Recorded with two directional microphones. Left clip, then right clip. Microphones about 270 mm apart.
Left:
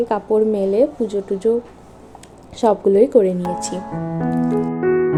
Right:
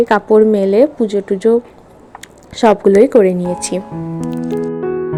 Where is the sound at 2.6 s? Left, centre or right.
Right.